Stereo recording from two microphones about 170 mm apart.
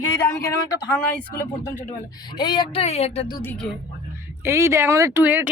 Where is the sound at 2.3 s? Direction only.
25° left (ahead or behind).